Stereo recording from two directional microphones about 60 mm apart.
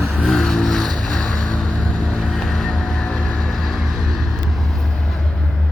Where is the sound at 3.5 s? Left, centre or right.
Centre.